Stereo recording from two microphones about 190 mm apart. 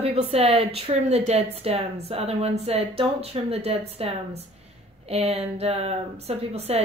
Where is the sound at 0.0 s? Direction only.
30° right (ahead or behind).